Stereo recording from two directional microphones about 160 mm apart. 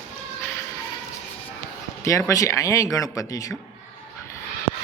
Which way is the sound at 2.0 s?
20° left (ahead or behind).